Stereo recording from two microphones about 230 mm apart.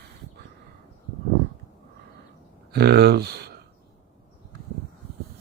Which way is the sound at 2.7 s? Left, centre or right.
Right.